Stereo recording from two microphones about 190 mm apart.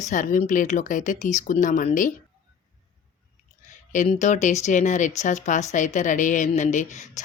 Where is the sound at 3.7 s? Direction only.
40° left (ahead or behind).